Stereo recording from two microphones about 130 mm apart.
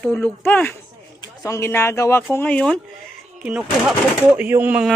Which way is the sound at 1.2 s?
25° left (ahead or behind).